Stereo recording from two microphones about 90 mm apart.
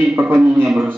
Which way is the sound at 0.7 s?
10° right (ahead or behind).